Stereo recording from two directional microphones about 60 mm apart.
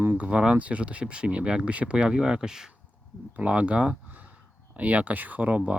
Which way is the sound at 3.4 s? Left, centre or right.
Right.